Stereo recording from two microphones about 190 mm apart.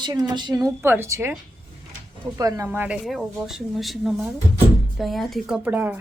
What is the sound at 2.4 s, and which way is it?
Speech, 20° right (ahead or behind).